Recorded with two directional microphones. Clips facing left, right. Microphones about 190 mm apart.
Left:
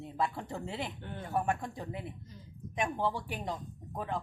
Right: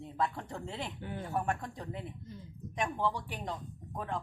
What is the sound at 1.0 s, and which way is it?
Speech, 10° right (ahead or behind).